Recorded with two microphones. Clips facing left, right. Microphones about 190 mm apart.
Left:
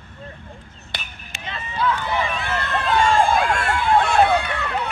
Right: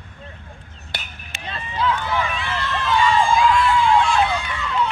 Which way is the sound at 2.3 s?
50° left (ahead or behind).